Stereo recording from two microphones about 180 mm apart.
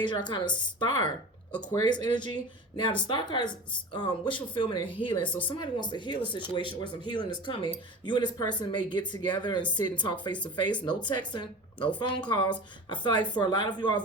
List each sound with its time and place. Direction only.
0.0 s a woman's voice: 25° left (ahead or behind)